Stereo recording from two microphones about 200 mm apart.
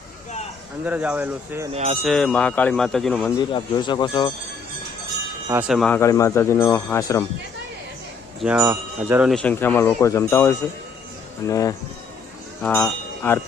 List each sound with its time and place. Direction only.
0.9 s speech: 5° right (ahead or behind)
1.7 s speech: 35° right (ahead or behind)
2.0 s speech: 5° left (ahead or behind)
3.5 s speech: 20° left (ahead or behind)
5.5 s speech: 5° right (ahead or behind)
5.9 s speech: 15° left (ahead or behind)
8.4 s speech: 5° right (ahead or behind)
9.4 s speech: 10° left (ahead or behind)